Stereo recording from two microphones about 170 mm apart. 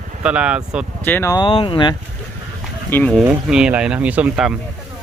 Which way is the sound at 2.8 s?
10° left (ahead or behind).